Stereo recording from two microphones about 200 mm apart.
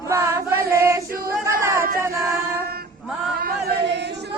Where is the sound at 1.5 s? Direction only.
15° right (ahead or behind).